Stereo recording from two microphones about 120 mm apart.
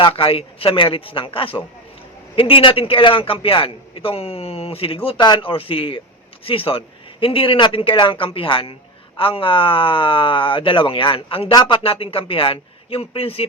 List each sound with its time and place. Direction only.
0.0 s a man's voice: 50° left (ahead or behind)